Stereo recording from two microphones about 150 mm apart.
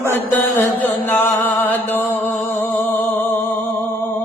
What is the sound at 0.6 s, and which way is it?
Music, 15° left (ahead or behind).